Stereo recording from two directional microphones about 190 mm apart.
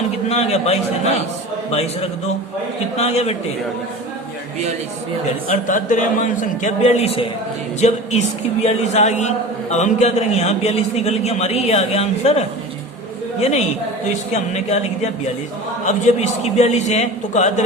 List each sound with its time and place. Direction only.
0.3 s a man's voice: 35° left (ahead or behind)
5.5 s a man's voice: 40° left (ahead or behind)
14.5 s a man's voice: 35° left (ahead or behind)